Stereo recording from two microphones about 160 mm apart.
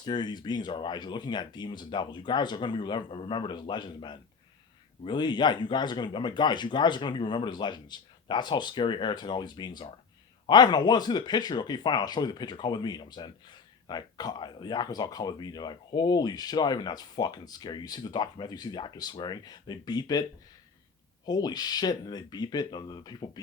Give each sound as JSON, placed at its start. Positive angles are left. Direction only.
{"t": 0.0, "sound": "speech", "side_deg": 25}
{"t": 21.2, "sound": "speech", "side_deg": 25}